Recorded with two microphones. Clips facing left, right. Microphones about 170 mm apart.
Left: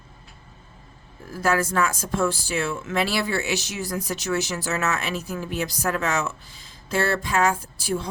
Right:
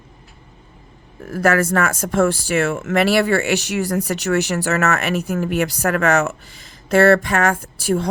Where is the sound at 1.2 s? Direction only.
70° right (ahead or behind).